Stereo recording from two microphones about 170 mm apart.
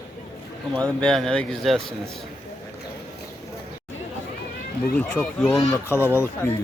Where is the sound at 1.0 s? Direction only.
5° left (ahead or behind).